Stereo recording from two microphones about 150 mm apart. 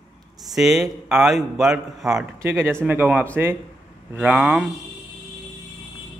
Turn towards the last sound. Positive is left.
turn(degrees=-5)  # may be behind; listen again after turning